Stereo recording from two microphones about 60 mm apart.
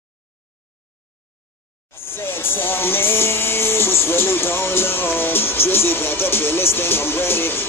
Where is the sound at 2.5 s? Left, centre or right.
Left.